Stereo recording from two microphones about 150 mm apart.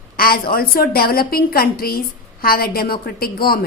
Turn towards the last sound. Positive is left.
turn(degrees=90)